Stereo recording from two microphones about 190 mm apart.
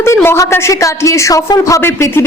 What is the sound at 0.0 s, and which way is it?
A woman's voice, 10° left (ahead or behind).